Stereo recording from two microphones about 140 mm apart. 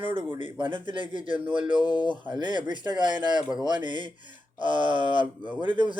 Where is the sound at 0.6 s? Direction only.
35° right (ahead or behind).